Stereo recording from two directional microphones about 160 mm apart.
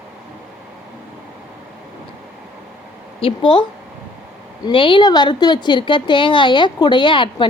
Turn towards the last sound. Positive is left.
turn(degrees=30)  # may be behind; listen again after turning